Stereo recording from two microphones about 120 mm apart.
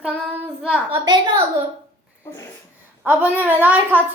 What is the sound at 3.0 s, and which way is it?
Child singing, 15° right (ahead or behind).